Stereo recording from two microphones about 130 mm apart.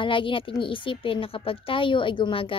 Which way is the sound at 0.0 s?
40° left (ahead or behind).